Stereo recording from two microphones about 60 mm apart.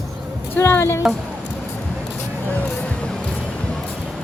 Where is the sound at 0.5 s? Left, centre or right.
Left.